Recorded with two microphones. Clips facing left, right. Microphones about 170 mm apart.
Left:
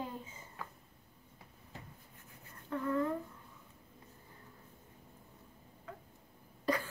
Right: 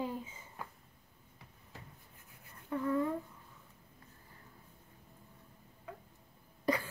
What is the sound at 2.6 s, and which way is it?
Speech, 10° right (ahead or behind).